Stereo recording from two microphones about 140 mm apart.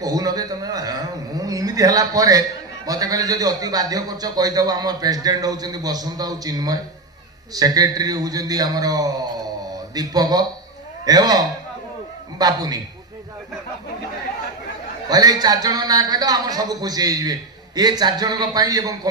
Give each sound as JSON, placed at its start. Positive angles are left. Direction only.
{"t": 0.0, "sound": "a man's voice", "side_deg": -25}
{"t": 15.0, "sound": "a man's voice", "side_deg": -30}